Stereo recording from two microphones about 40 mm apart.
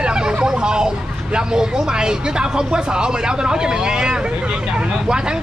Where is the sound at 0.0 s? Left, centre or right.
Right.